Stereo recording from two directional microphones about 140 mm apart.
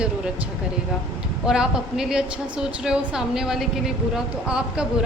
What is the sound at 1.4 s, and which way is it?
A woman's voice, 5° right (ahead or behind).